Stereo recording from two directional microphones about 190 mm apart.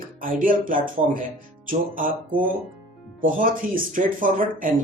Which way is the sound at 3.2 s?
45° right (ahead or behind).